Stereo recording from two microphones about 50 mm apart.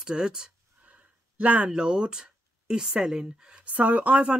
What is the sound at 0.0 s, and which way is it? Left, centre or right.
Speech, centre.